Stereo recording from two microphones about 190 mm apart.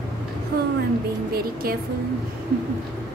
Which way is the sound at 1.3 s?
50° right (ahead or behind).